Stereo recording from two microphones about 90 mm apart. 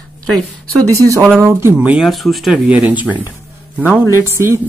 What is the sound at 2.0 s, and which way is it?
Speech, centre (ahead or behind).